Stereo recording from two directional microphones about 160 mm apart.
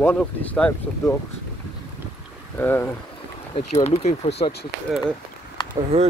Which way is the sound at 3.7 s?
45° left (ahead or behind).